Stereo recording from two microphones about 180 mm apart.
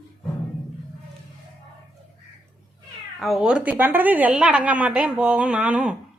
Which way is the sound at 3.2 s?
Centre (ahead or behind).